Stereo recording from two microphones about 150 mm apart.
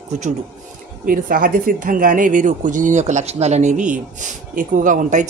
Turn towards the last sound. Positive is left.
turn(degrees=-60)  # may be behind; listen again after turning